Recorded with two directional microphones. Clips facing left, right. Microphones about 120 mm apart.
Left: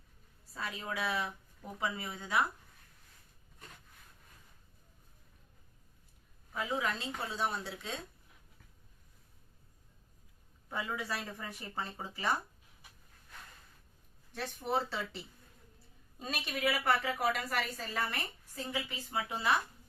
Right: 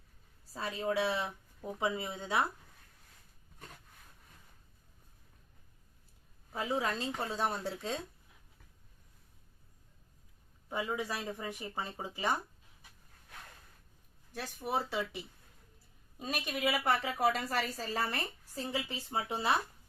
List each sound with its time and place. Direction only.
0.5 s a woman's voice: 30° right (ahead or behind)
6.5 s a woman's voice: 30° right (ahead or behind)
7.3 s speech: 45° right (ahead or behind)
10.7 s speech: 15° right (ahead or behind)
14.3 s a woman's voice: 10° right (ahead or behind); by 19.5 s 30° right (ahead or behind)